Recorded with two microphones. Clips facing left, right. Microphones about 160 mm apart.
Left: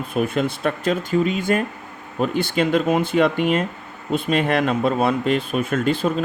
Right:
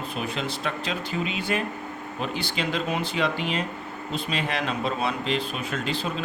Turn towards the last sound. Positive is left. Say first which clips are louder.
# left 9 dB
turn(degrees=50)  # may be behind; listen again after turning